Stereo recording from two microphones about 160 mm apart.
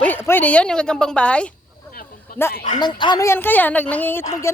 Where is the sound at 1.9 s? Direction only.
65° left (ahead or behind).